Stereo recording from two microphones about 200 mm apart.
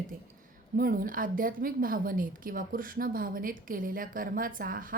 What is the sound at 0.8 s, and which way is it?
A woman's voice, 45° right (ahead or behind).